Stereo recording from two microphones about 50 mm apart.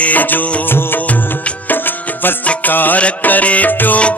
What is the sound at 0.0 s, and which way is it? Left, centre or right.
Music, left.